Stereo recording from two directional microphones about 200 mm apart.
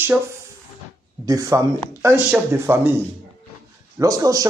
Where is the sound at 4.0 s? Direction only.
15° right (ahead or behind).